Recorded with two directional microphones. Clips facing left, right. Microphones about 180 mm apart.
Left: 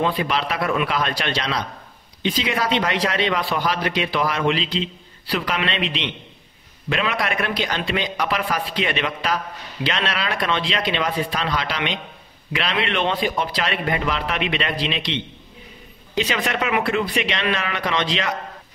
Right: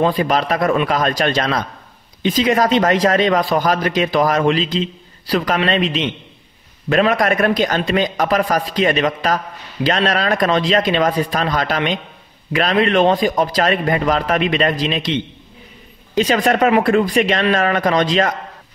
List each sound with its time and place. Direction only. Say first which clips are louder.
0.0 s a man's voice: right 6 dB; 40° right (ahead or behind)
16.2 s a man's voice: right 8 dB; 40° right (ahead or behind)